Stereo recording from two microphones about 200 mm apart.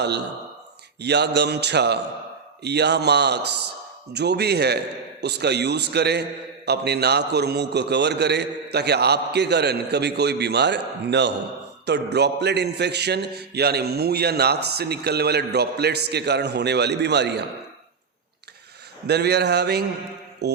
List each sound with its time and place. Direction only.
1.0 s a man's voice: 60° right (ahead or behind)
19.0 s a man's voice: 55° right (ahead or behind)